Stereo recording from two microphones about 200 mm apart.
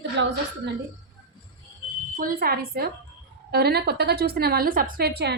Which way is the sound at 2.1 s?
45° right (ahead or behind).